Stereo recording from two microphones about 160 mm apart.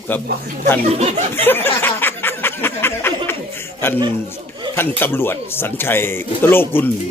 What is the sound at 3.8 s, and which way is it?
Speech, 15° left (ahead or behind).